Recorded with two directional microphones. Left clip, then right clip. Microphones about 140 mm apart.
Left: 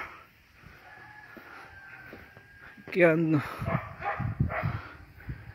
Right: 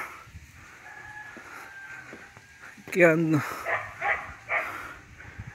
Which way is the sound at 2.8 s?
5° right (ahead or behind).